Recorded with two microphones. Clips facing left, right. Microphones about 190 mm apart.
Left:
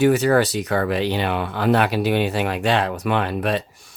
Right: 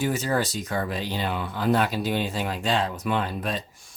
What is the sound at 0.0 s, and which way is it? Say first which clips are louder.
Speech: left 9 dB; 70° left (ahead or behind).